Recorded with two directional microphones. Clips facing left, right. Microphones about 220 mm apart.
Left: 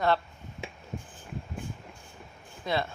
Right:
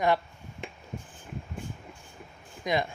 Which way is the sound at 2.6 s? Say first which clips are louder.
Right 2 dB; 15° right (ahead or behind).